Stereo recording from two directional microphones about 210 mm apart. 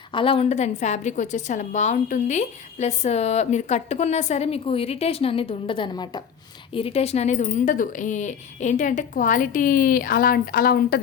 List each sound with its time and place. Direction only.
0.1 s a woman's voice: 25° left (ahead or behind); by 11.0 s 45° left (ahead or behind)